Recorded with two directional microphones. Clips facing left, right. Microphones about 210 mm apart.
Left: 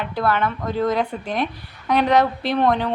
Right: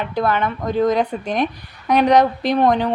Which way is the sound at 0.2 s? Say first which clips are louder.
Right 1 dB; 20° right (ahead or behind).